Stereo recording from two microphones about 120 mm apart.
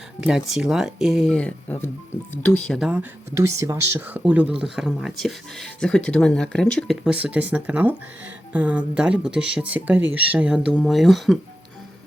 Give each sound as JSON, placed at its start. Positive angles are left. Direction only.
{"t": 0.2, "sound": "speech", "side_deg": -5}
{"t": 2.6, "sound": "speech", "side_deg": -5}
{"t": 3.3, "sound": "speech", "side_deg": -25}
{"t": 7.0, "sound": "speech", "side_deg": -10}